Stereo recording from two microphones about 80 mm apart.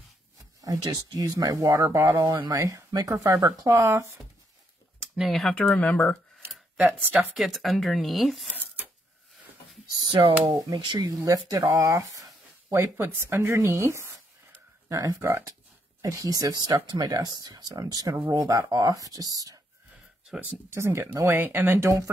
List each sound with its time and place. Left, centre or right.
0.9 s speech: right
1.6 s speech: right
3.1 s speech: right
5.1 s speech: centre
5.5 s speech: centre
6.8 s speech: right
7.3 s speech: centre
10.4 s speech: right
14.9 s speech: right
20.7 s speech: right
21.7 s speech: right